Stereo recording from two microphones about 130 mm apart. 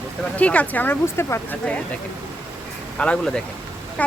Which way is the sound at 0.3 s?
10° left (ahead or behind).